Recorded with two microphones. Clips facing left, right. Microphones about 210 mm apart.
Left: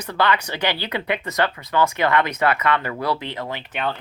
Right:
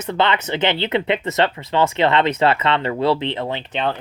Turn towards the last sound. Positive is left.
turn(degrees=-25)  # may be behind; listen again after turning